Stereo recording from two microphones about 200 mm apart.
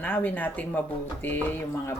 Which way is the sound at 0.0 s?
10° left (ahead or behind).